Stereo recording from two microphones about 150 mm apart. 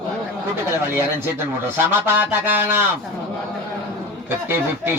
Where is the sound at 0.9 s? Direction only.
15° right (ahead or behind).